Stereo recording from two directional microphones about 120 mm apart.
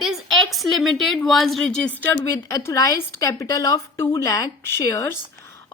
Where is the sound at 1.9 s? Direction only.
15° left (ahead or behind).